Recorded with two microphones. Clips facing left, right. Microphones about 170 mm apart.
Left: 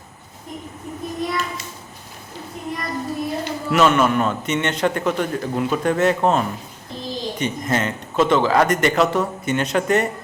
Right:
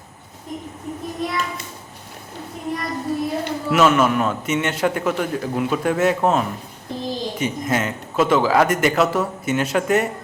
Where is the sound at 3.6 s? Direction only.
5° right (ahead or behind).